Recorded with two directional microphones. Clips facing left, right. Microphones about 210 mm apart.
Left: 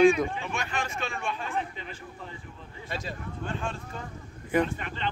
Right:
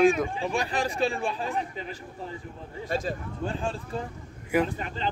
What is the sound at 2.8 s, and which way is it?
Speech, 50° right (ahead or behind).